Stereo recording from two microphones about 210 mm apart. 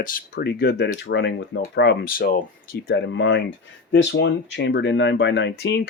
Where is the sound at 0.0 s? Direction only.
45° left (ahead or behind).